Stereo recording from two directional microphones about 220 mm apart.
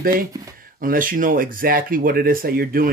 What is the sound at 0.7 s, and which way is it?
Speech, 40° right (ahead or behind).